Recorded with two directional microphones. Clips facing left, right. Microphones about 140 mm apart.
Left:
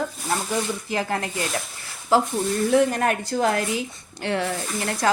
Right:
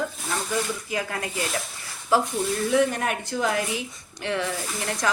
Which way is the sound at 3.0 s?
40° left (ahead or behind).